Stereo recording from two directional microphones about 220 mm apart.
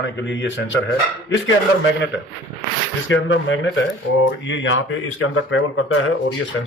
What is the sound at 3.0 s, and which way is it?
Speech, 60° left (ahead or behind).